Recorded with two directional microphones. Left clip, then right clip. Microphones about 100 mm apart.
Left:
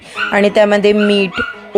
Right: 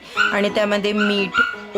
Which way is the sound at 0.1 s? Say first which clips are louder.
Left 5 dB; 50° left (ahead or behind).